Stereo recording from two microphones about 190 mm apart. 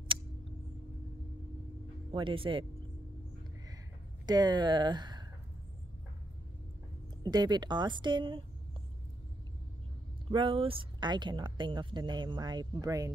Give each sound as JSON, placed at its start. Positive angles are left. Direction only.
{"t": 2.1, "sound": "a woman's voice", "side_deg": -25}
{"t": 4.3, "sound": "speech", "side_deg": -20}
{"t": 7.2, "sound": "a woman's voice", "side_deg": -20}
{"t": 10.3, "sound": "a woman's voice", "side_deg": -25}